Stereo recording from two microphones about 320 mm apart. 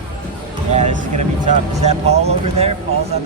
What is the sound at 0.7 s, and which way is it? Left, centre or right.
Speech, right.